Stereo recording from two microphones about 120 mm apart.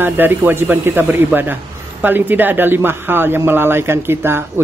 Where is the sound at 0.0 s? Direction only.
15° right (ahead or behind).